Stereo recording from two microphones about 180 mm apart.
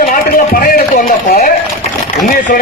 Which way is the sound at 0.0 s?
50° left (ahead or behind).